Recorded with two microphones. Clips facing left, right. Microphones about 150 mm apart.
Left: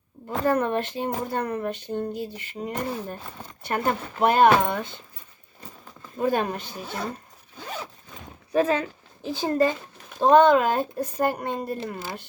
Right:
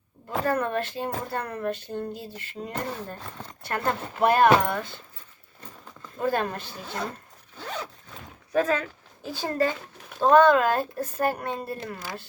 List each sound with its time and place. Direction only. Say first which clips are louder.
0.4 s speech: left 4 dB; 20° left (ahead or behind)
5.5 s zipper: left 1 dB; 10° left (ahead or behind)
8.5 s a woman's voice: left 2 dB; 25° left (ahead or behind)